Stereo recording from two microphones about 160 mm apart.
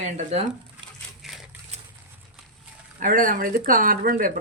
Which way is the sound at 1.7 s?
45° right (ahead or behind).